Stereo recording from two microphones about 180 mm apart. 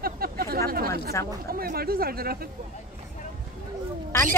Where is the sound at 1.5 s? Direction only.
60° right (ahead or behind).